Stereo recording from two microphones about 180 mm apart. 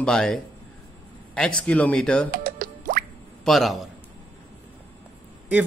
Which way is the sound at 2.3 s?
50° right (ahead or behind).